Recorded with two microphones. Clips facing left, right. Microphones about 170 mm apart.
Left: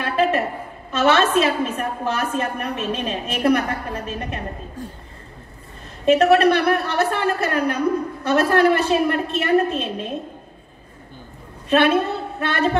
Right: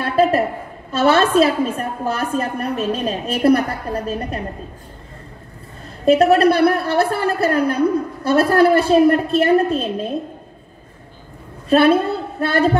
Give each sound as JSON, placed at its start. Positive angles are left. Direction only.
{"t": 0.0, "sound": "a sound", "side_deg": -35}
{"t": 0.9, "sound": "a woman's voice", "side_deg": -35}
{"t": 6.0, "sound": "a woman's voice", "side_deg": -35}
{"t": 11.7, "sound": "a woman's voice", "side_deg": -35}